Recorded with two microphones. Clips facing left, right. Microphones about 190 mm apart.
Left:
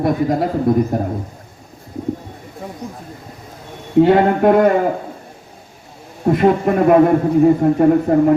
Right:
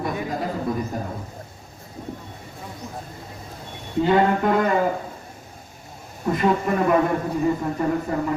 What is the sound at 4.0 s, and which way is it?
Speech, 60° left (ahead or behind).